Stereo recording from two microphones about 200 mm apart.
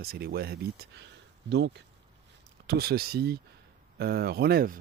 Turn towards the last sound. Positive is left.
turn(degrees=-45)  # may be behind; listen again after turning